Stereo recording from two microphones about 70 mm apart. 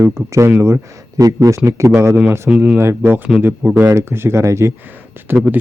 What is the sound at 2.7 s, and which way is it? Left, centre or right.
Speech, right.